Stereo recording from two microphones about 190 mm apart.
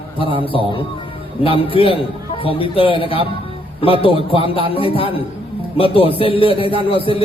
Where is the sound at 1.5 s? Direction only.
30° left (ahead or behind).